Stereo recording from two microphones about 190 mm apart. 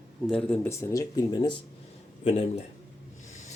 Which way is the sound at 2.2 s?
35° left (ahead or behind).